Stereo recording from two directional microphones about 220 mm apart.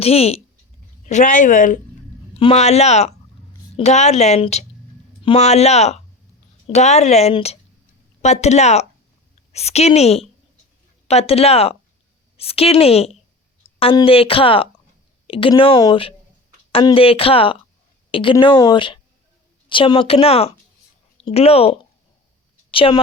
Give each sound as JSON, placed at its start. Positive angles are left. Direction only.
{"t": 0.0, "sound": "a woman's voice", "side_deg": 25}